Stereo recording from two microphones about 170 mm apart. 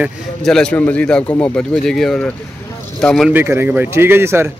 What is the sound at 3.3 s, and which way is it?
Speech, 15° right (ahead or behind).